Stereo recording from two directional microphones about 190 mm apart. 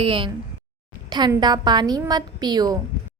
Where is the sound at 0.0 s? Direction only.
25° right (ahead or behind).